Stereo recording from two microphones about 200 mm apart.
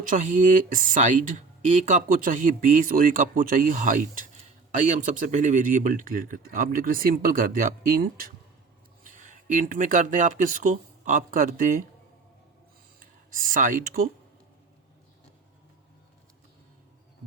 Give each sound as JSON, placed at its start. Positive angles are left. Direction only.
{"t": 0.1, "sound": "speech", "side_deg": -40}
{"t": 13.3, "sound": "speech", "side_deg": -40}